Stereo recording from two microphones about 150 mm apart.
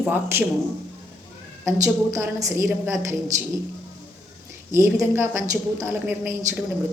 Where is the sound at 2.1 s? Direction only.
20° right (ahead or behind).